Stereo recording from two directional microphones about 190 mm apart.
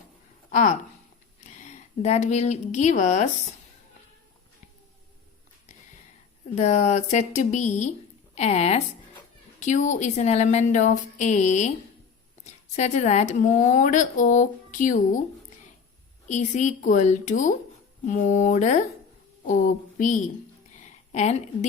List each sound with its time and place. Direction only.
1.4 s a woman's voice: 40° left (ahead or behind)
6.6 s speech: 35° left (ahead or behind)
16.2 s a woman's voice: 40° left (ahead or behind)
20.7 s a sound: 40° left (ahead or behind)